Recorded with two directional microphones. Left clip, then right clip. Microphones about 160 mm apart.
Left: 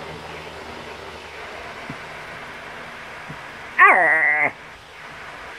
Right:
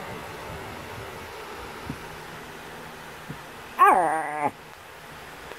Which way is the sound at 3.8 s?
40° right (ahead or behind).